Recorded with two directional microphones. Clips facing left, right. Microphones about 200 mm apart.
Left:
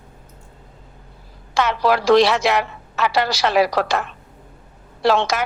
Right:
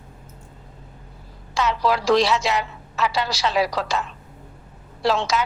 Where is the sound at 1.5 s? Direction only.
65° left (ahead or behind).